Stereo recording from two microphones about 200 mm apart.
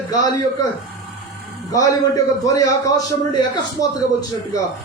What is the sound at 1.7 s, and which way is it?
A man's voice, 15° left (ahead or behind).